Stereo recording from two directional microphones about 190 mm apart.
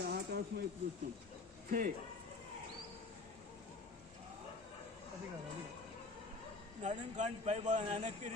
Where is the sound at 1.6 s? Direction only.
45° right (ahead or behind).